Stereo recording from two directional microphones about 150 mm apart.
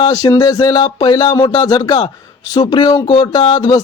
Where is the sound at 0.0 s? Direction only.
25° left (ahead or behind).